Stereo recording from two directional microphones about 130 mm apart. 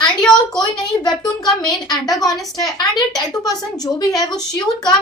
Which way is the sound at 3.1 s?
30° left (ahead or behind).